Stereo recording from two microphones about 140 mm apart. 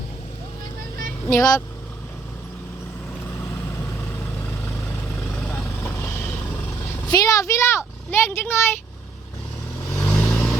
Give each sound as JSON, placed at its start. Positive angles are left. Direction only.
{"t": 1.3, "sound": "speech", "side_deg": 25}
{"t": 5.5, "sound": "vehicle", "side_deg": 15}
{"t": 7.1, "sound": "speech", "side_deg": 25}
{"t": 9.9, "sound": "vehicle", "side_deg": 10}